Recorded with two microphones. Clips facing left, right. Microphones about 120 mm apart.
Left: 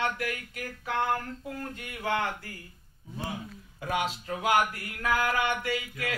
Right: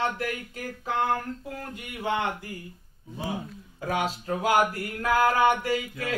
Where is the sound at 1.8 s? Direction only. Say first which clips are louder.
Right 2 dB; 20° right (ahead or behind).